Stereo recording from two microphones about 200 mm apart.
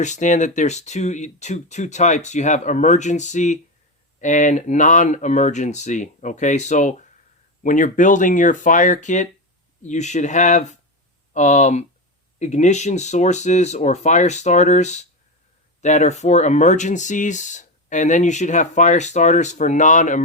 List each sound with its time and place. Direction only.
0.0 s speech: 35° left (ahead or behind)